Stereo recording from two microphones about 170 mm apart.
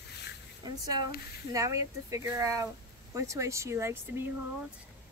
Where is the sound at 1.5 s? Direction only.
20° right (ahead or behind).